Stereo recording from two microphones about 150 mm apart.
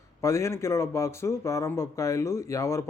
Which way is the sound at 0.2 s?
20° left (ahead or behind).